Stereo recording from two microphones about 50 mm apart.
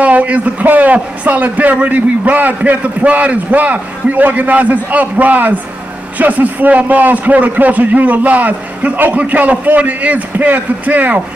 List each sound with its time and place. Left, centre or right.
0.0 s a man's voice: right